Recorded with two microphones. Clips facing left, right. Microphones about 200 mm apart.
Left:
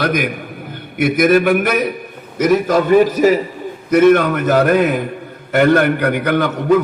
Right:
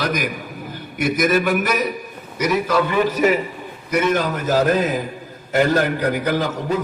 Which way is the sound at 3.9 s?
55° left (ahead or behind).